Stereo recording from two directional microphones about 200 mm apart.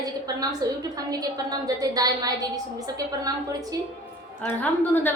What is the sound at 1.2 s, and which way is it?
A woman's voice, 20° right (ahead or behind).